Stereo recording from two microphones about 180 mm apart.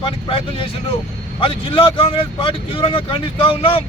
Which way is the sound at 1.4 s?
30° left (ahead or behind).